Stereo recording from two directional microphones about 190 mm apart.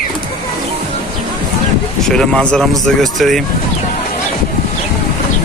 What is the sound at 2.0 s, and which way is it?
Speech, 5° left (ahead or behind).